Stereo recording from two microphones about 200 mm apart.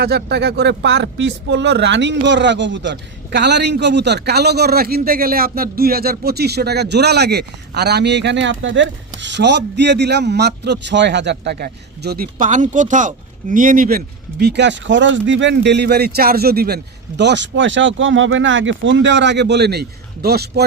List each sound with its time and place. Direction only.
0.0 s speech: 55° right (ahead or behind)